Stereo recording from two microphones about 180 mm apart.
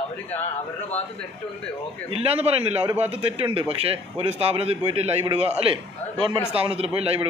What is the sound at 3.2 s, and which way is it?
A man's voice, 30° right (ahead or behind).